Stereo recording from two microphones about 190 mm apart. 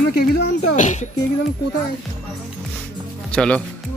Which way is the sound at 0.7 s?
40° left (ahead or behind).